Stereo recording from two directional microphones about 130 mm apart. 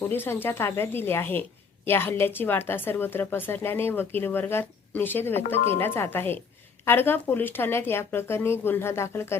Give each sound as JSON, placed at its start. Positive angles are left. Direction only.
{"t": 0.0, "sound": "speech", "side_deg": 15}